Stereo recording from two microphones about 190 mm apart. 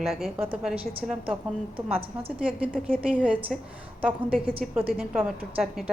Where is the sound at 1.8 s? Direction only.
30° right (ahead or behind).